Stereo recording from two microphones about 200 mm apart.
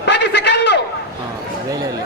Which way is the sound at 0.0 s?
60° left (ahead or behind).